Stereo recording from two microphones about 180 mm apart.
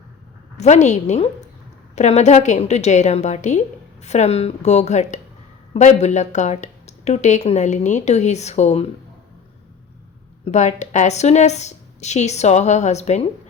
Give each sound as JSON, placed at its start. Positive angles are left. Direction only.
{"t": 0.5, "sound": "speech", "side_deg": 40}
{"t": 10.4, "sound": "speech", "side_deg": 40}